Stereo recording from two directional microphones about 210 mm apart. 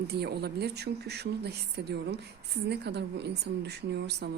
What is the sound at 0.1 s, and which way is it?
A woman's voice, 50° right (ahead or behind).